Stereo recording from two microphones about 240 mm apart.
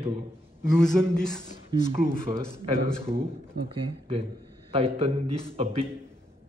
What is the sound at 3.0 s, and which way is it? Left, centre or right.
A man's voice, right.